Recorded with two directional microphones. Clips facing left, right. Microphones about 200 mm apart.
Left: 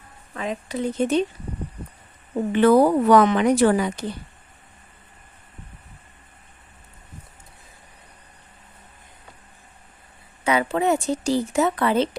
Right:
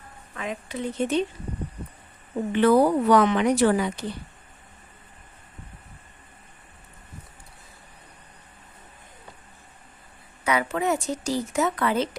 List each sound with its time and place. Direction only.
0.3 s speech: 35° left (ahead or behind)
2.6 s speech: 50° left (ahead or behind)
10.4 s speech: 30° left (ahead or behind)